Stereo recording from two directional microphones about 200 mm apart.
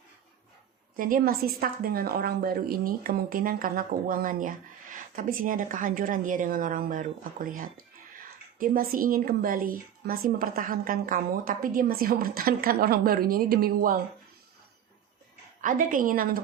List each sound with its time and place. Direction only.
0.9 s a woman's voice: 45° right (ahead or behind)
15.6 s a woman's voice: 40° right (ahead or behind)